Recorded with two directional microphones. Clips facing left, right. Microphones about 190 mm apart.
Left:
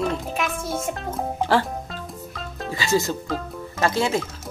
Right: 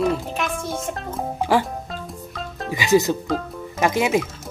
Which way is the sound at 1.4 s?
15° right (ahead or behind).